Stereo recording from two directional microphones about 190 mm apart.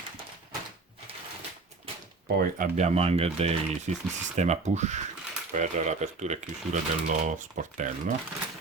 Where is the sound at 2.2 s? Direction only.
55° right (ahead or behind).